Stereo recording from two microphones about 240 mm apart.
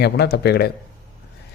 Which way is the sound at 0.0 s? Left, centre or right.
Left.